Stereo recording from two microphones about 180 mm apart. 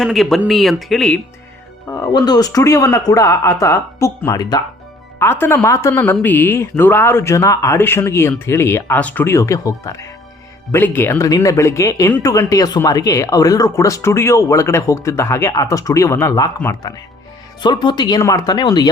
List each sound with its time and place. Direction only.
0.0 s speech: centre (ahead or behind)
1.9 s speech: 20° left (ahead or behind)